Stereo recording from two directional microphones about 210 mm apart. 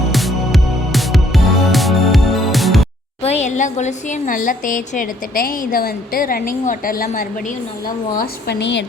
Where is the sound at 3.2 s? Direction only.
30° left (ahead or behind).